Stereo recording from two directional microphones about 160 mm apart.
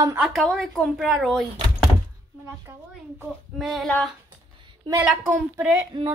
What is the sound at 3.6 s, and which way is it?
Speech, centre (ahead or behind).